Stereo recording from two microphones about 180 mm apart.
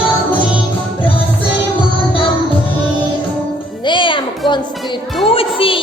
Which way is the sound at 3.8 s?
25° left (ahead or behind).